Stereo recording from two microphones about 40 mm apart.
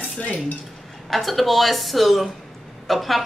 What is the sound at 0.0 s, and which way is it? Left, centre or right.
Dishes, left.